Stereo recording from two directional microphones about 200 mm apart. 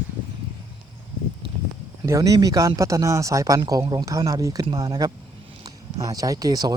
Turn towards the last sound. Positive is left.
turn(degrees=-20)  # may be behind; listen again after turning